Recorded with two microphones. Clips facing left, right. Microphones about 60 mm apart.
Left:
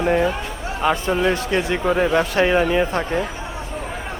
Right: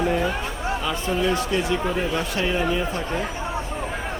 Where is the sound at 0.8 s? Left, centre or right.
Left.